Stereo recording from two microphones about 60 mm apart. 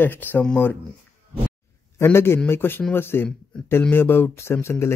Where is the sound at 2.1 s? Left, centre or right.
Left.